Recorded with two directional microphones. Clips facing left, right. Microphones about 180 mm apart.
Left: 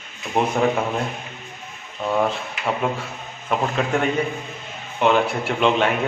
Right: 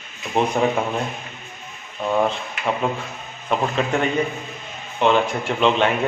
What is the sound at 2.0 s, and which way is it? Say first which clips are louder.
A man's voice: right 1 dB; centre (ahead or behind).